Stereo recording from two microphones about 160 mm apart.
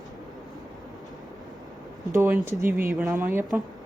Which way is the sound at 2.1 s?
15° right (ahead or behind).